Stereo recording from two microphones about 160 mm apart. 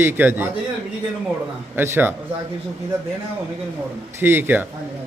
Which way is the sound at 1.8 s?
10° right (ahead or behind).